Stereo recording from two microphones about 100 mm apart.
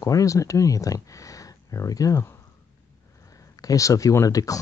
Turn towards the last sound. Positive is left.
turn(degrees=35)  # may be behind; listen again after turning